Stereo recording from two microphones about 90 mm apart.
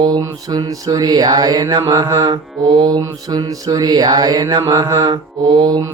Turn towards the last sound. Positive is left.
turn(degrees=-50)  # may be behind; listen again after turning